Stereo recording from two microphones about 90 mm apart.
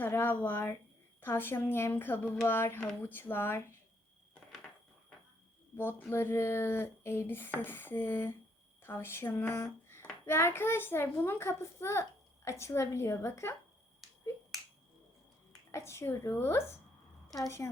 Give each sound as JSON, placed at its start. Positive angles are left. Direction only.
{"t": 0.0, "sound": "speech", "side_deg": 25}
{"t": 5.7, "sound": "a woman's voice", "side_deg": 25}
{"t": 15.7, "sound": "a woman's voice", "side_deg": 30}